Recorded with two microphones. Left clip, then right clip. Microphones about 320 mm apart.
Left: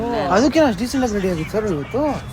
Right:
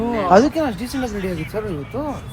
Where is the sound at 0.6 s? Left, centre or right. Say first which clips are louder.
Left 6 dB; centre.